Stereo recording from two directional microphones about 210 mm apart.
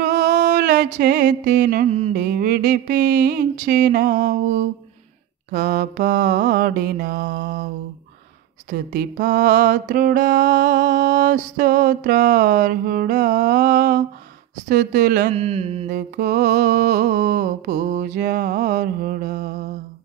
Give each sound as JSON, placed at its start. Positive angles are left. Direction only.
{"t": 0.4, "sound": "music", "side_deg": -50}
{"t": 0.9, "sound": "a sound", "side_deg": -50}
{"t": 1.5, "sound": "mantra", "side_deg": -40}
{"t": 2.1, "sound": "a sound", "side_deg": -45}
{"t": 5.5, "sound": "mantra", "side_deg": -40}
{"t": 16.0, "sound": "mantra", "side_deg": -45}